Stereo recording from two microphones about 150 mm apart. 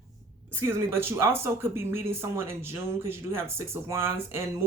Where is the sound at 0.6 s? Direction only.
15° right (ahead or behind).